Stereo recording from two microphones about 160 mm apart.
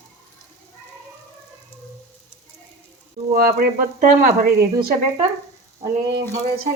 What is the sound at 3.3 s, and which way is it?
Speech, 65° right (ahead or behind).